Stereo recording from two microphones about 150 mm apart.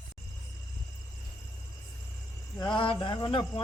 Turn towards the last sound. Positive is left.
turn(degrees=30)  # may be behind; listen again after turning